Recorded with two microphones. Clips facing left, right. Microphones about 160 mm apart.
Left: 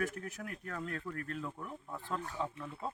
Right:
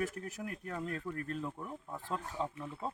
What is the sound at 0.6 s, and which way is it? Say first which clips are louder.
Speech: right 1 dB; 20° right (ahead or behind).